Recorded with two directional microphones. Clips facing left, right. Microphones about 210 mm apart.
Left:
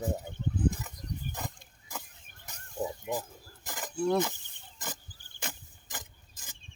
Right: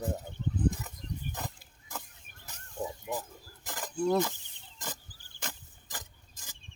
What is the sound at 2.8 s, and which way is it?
Mechanisms, 15° left (ahead or behind).